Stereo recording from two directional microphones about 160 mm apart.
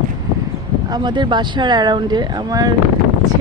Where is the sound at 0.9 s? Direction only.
25° right (ahead or behind).